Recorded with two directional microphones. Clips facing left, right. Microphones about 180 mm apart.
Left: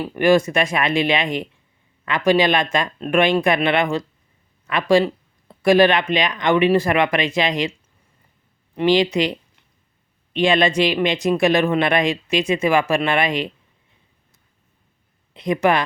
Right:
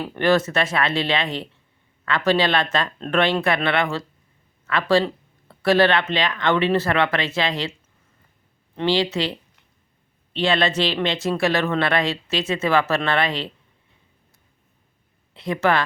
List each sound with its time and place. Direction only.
0.0 s speech: 10° left (ahead or behind)
8.7 s speech: 15° left (ahead or behind)
15.3 s speech: 15° left (ahead or behind)